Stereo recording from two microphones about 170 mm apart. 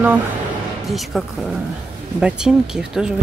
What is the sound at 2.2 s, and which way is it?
Speech, 5° right (ahead or behind).